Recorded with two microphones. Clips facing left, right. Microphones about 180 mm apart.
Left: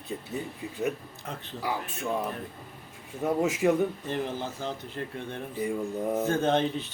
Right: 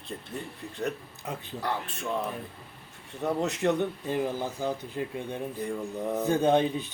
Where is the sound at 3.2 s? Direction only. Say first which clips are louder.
Left 2 dB; 5° left (ahead or behind).